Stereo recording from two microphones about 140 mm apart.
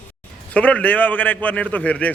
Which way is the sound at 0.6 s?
10° left (ahead or behind).